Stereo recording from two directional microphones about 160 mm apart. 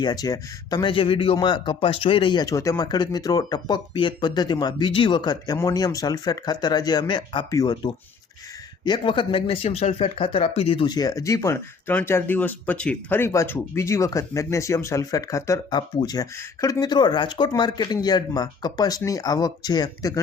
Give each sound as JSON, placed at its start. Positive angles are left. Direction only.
{"t": 0.0, "sound": "speech", "side_deg": 25}